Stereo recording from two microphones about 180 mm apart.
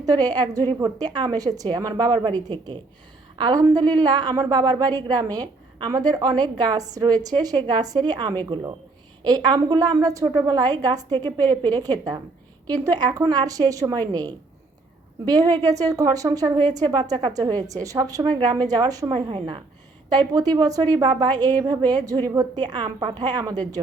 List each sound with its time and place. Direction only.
0.0 s a woman's voice: 20° right (ahead or behind)